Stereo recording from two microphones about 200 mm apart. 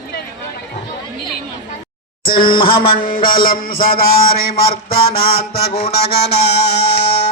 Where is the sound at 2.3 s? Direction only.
25° left (ahead or behind).